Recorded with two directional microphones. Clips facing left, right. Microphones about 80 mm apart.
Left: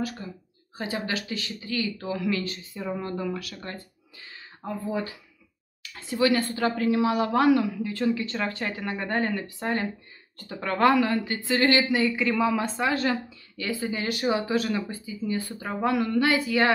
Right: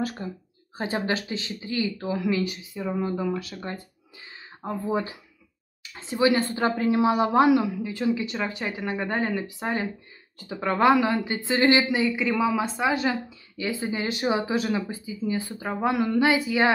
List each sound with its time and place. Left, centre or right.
0.2 s speech: right
2.7 s a woman's voice: centre
3.3 s speech: right
7.1 s a woman's voice: right; by 13.2 s centre
13.6 s speech: centre